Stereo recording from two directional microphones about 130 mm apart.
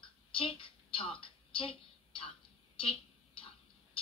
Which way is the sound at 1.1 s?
45° left (ahead or behind).